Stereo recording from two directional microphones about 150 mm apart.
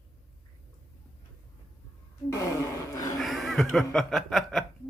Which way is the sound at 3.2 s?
Centre (ahead or behind).